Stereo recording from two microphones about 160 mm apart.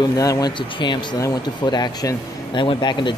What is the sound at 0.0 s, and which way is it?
Speech, 20° left (ahead or behind).